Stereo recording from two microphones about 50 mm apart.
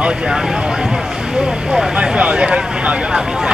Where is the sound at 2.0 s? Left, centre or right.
Centre.